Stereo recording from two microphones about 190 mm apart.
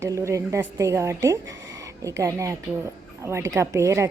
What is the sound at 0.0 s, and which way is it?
A woman's voice, 15° right (ahead or behind).